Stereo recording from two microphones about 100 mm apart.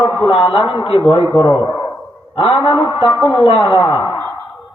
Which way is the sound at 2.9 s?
35° left (ahead or behind).